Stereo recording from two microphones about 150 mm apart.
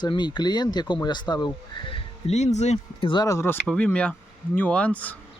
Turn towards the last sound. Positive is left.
turn(degrees=10)  # may be behind; listen again after turning